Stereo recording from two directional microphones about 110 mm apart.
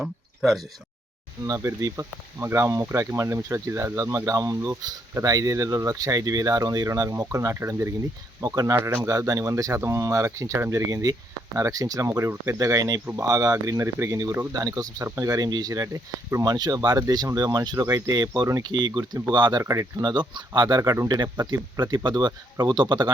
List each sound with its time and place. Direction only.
0.0 s speech: centre (ahead or behind)
1.5 s speech: 30° right (ahead or behind)
18.6 s speech: 45° right (ahead or behind)
19.6 s speech: 30° right (ahead or behind)
21.3 s speech: 25° right (ahead or behind)
21.8 s speech: 45° right (ahead or behind)